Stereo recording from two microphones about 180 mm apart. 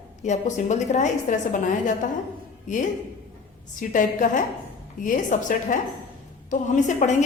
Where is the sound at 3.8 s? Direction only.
45° left (ahead or behind).